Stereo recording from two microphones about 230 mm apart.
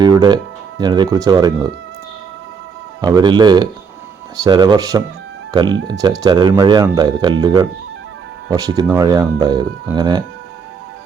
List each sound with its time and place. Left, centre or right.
0.0 s speech: centre
3.0 s speech: centre